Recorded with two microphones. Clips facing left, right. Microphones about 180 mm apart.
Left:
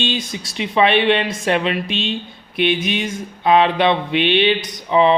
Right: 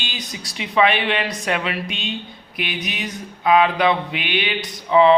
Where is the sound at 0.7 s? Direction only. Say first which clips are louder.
Left 3 dB; 25° left (ahead or behind).